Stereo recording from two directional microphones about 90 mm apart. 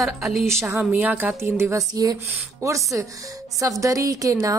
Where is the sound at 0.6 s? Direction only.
20° right (ahead or behind); by 4.5 s 40° right (ahead or behind).